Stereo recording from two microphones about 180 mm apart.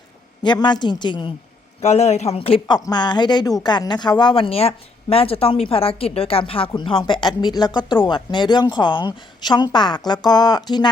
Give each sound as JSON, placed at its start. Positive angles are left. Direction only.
{"t": 0.4, "sound": "a woman's voice", "side_deg": 25}
{"t": 1.8, "sound": "a woman's voice", "side_deg": 35}